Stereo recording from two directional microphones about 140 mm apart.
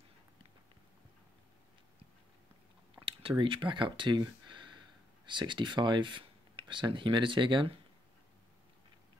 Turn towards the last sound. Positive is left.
turn(degrees=-35)  # may be behind; listen again after turning